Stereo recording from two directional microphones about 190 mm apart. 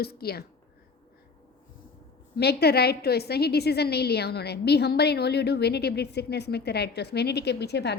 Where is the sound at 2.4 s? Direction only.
60° left (ahead or behind).